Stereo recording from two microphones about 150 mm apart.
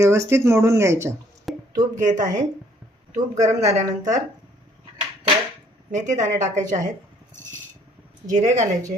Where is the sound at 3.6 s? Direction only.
45° right (ahead or behind).